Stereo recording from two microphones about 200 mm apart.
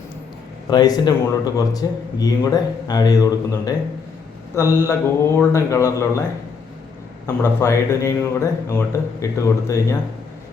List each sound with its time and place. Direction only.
0.7 s a man's voice: 20° left (ahead or behind)
7.4 s a man's voice: 10° left (ahead or behind)